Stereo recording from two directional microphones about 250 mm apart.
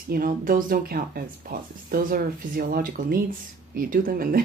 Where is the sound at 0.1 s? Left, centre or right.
Right.